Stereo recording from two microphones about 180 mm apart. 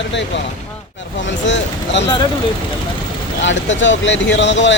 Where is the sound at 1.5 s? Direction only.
80° left.